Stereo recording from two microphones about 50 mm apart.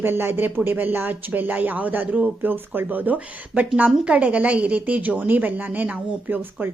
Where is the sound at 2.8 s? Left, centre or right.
Right.